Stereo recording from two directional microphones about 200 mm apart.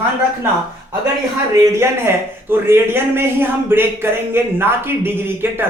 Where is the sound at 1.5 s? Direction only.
15° right (ahead or behind).